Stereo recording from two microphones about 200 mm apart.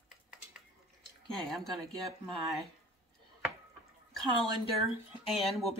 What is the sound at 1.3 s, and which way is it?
Speech, centre (ahead or behind).